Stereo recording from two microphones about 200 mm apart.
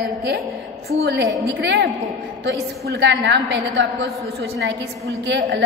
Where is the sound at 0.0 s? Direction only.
55° right (ahead or behind).